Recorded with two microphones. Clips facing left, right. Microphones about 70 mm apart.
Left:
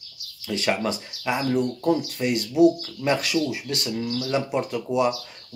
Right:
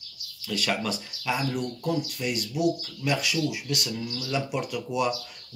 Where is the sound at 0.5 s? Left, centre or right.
Left.